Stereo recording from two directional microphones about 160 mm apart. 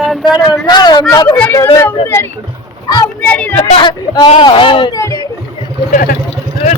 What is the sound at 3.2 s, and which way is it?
Speech, 10° left (ahead or behind).